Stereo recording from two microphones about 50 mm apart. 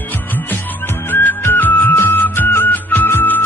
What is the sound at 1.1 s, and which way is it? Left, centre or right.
Music, left.